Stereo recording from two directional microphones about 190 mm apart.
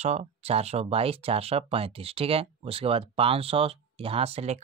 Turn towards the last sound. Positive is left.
turn(degrees=-35)  # may be behind; listen again after turning